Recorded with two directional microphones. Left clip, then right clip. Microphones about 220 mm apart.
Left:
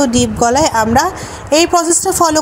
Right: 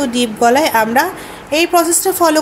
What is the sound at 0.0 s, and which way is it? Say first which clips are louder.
A woman's voice: left 1 dB; 20° left (ahead or behind).